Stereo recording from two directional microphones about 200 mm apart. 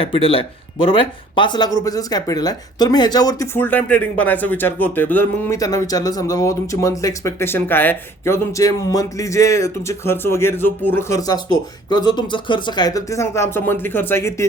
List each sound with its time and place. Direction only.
0.0 s speech: 25° left (ahead or behind)